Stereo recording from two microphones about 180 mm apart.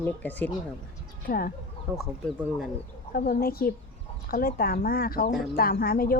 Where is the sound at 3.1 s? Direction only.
55° left (ahead or behind).